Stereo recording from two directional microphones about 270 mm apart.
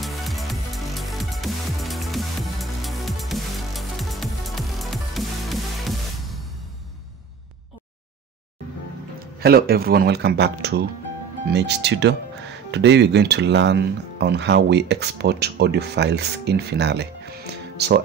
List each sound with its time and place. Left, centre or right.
0.0 s music: centre
9.4 s speech: right